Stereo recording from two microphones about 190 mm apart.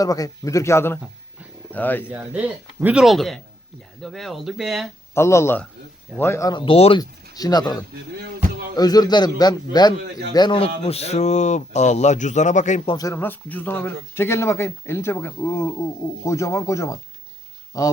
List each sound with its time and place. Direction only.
0.0 s speech: 20° left (ahead or behind)
2.0 s speech: 5° right (ahead or behind)
5.1 s a man's voice: 15° left (ahead or behind); by 7.0 s 30° left (ahead or behind)
7.0 s a man's voice: 20° left (ahead or behind); by 12.9 s 40° left (ahead or behind)
12.9 s speech: 20° left (ahead or behind)